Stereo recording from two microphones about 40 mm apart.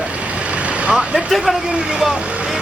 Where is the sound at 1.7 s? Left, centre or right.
Centre.